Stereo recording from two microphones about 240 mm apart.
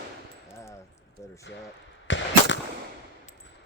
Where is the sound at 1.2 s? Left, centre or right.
Centre.